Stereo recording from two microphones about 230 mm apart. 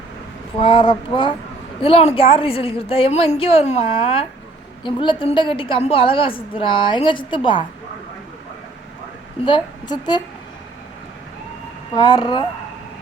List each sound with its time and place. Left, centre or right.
0.6 s a woman's voice: left
9.4 s a woman's voice: centre
11.9 s a woman's voice: centre